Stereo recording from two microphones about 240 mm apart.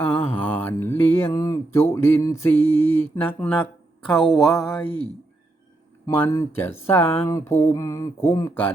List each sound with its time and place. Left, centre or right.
0.1 s mantra: left
0.4 s mantra: centre
4.0 s a sound: centre
6.1 s mantra: centre